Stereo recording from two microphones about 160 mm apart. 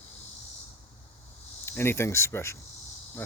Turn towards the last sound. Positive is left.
turn(degrees=10)  # may be behind; listen again after turning